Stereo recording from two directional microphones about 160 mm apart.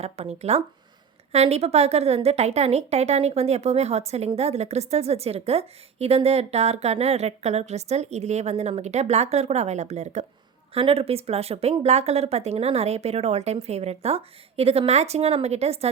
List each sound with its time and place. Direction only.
0.0 s a woman's voice: 40° right (ahead or behind)